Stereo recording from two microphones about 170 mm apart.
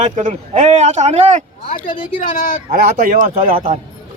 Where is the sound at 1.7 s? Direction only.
55° left (ahead or behind).